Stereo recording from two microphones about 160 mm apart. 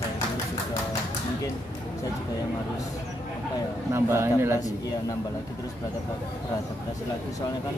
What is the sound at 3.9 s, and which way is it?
Speech, 15° right (ahead or behind).